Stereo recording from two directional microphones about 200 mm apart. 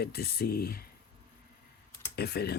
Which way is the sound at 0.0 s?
50° left (ahead or behind).